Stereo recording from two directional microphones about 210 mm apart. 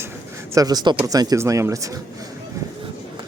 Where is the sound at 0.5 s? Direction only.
20° right (ahead or behind).